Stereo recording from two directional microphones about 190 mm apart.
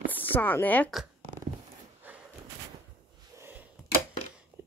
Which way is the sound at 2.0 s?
10° right (ahead or behind).